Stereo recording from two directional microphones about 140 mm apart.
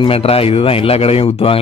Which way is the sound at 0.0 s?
45° left (ahead or behind).